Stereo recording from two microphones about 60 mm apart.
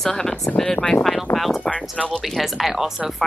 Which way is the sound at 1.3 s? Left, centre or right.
Centre.